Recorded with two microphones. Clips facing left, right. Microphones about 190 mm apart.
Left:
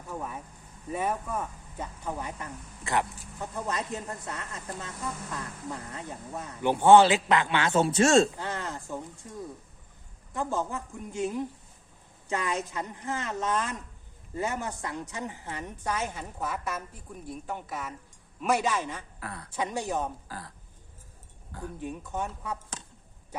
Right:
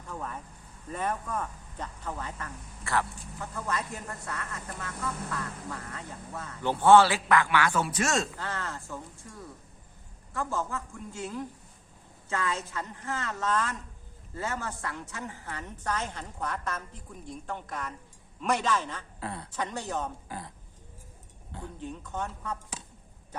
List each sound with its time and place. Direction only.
0.1 s a woman's voice: 10° left (ahead or behind); by 8.3 s 30° left (ahead or behind)
8.4 s a woman's voice: 15° left (ahead or behind)
19.2 s a woman's voice: 25° right (ahead or behind)
19.5 s a woman's voice: 15° left (ahead or behind)
20.2 s a woman's voice: 20° right (ahead or behind)
21.8 s a woman's voice: 10° left (ahead or behind)